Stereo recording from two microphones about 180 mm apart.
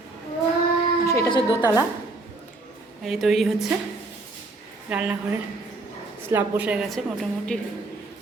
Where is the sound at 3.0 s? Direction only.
Centre (ahead or behind).